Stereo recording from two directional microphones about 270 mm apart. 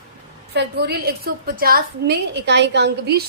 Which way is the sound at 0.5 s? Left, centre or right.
Right.